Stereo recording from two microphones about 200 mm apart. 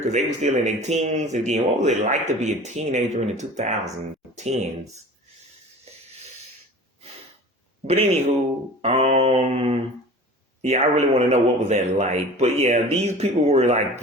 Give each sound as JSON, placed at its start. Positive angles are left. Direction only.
{"t": 0.0, "sound": "speech", "side_deg": -35}
{"t": 5.9, "sound": "a sound", "side_deg": -30}
{"t": 8.8, "sound": "speech", "side_deg": -30}